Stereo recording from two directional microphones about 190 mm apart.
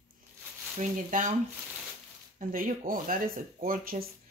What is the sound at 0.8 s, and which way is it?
Speech, 40° right (ahead or behind).